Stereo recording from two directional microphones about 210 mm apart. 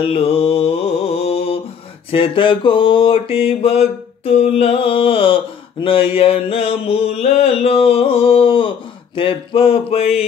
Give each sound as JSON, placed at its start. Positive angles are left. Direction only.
{"t": 0.0, "sound": "mantra", "side_deg": 25}